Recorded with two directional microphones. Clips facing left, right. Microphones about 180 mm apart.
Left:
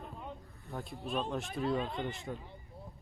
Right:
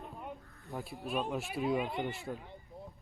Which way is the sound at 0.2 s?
Centre (ahead or behind).